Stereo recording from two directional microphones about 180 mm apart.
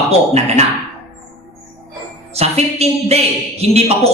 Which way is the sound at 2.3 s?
35° right (ahead or behind).